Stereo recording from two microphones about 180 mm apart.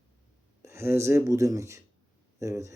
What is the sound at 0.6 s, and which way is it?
Speech, 15° right (ahead or behind).